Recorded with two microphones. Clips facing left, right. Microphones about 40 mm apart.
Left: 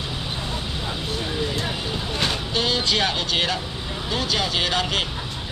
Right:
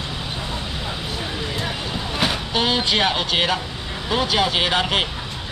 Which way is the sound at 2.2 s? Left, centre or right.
Centre.